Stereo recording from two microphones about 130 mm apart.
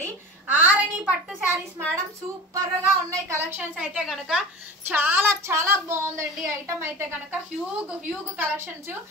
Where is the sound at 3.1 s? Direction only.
20° right (ahead or behind).